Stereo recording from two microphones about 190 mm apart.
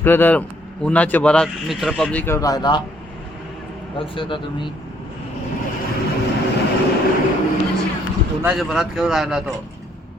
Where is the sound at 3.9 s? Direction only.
25° left (ahead or behind).